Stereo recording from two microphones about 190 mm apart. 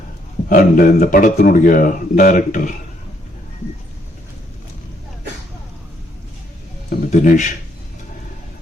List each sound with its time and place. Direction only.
0.4 s speech: 45° left (ahead or behind)
7.1 s speech: 40° left (ahead or behind)